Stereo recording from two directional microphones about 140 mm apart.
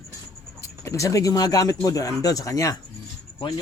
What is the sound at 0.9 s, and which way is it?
Speech, 20° left (ahead or behind).